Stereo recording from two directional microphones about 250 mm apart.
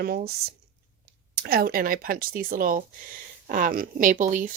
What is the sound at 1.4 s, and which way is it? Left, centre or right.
A woman's voice, right.